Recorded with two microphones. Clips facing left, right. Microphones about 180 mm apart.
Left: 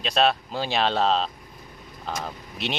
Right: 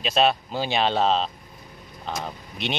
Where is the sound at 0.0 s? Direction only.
Centre (ahead or behind).